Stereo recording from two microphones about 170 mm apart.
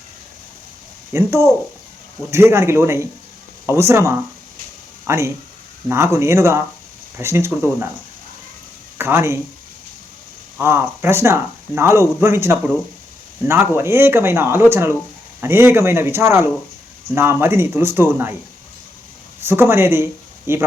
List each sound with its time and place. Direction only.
1.1 s speech: 15° right (ahead or behind)
9.0 s speech: 15° right (ahead or behind)
10.6 s speech: 15° right (ahead or behind)
19.4 s speech: 15° right (ahead or behind)